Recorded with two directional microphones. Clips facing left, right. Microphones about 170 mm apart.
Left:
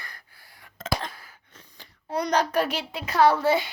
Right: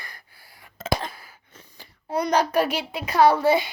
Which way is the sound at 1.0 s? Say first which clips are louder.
Right 2 dB; 10° right (ahead or behind).